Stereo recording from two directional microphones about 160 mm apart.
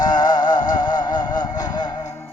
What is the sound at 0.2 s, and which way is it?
Music, 25° left (ahead or behind).